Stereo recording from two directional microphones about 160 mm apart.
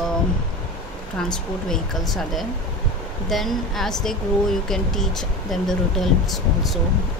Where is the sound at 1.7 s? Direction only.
Centre (ahead or behind).